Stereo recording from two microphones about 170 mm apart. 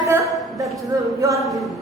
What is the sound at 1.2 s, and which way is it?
Speech, 20° right (ahead or behind).